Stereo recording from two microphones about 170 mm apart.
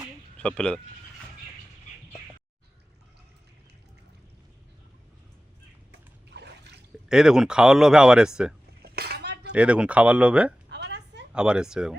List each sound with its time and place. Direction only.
0.3 s speech: 5° left (ahead or behind)
6.3 s trickle: 85° right
7.1 s speech: 5° right (ahead or behind)
8.8 s cutlery: 70° right (ahead or behind)
9.5 s speech: 5° right (ahead or behind)
10.7 s a sound: 90° right
11.3 s speech: 5° right (ahead or behind)